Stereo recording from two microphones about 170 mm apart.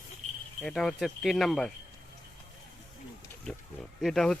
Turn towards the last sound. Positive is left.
turn(degrees=0)  # may be behind; listen again after turning